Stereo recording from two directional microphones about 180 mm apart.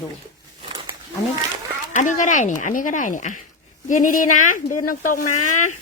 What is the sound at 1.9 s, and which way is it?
Speech, 45° left (ahead or behind).